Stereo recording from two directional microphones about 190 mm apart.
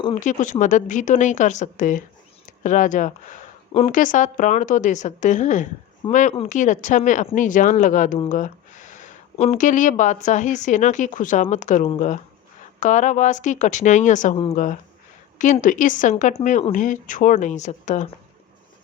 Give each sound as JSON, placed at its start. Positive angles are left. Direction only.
{"t": 0.2, "sound": "speech", "side_deg": 40}